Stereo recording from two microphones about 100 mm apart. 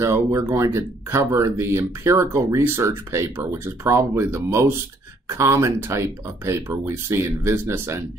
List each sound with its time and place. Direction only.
0.0 s speech: 30° right (ahead or behind)